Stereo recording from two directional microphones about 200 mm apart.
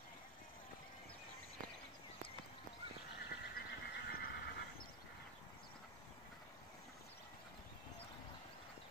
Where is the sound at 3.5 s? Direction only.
50° left (ahead or behind).